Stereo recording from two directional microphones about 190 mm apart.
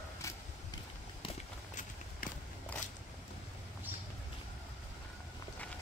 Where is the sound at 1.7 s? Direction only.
45° left (ahead or behind).